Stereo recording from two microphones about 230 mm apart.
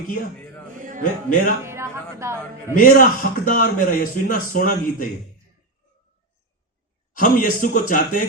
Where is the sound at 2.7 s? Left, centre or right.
Left.